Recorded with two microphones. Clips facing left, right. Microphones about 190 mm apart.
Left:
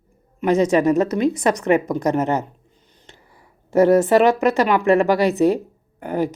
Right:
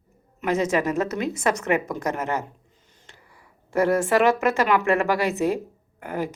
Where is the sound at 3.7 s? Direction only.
40° left (ahead or behind).